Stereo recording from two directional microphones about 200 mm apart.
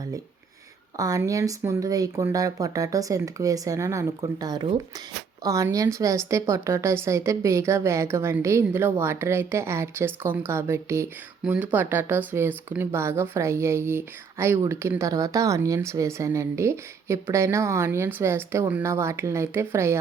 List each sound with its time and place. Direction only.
0.9 s speech: 15° right (ahead or behind)